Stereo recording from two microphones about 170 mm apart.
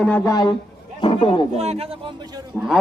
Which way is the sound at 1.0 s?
30° left (ahead or behind).